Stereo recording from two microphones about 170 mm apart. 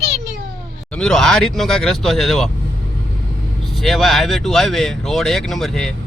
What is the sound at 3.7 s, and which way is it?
Speech, centre (ahead or behind).